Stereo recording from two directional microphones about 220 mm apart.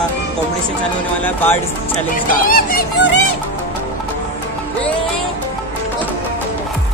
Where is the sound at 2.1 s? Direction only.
40° left (ahead or behind).